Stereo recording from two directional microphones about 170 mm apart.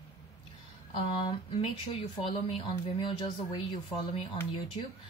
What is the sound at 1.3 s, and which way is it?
A woman's voice, 30° left (ahead or behind).